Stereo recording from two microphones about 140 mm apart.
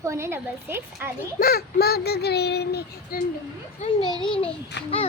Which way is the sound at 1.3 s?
90° left.